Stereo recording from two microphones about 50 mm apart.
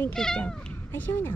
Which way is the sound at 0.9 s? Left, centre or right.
Left.